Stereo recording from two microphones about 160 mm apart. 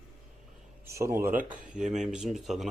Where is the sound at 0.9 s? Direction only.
15° right (ahead or behind).